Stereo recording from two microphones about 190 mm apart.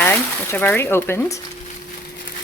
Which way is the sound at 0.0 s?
10° left (ahead or behind).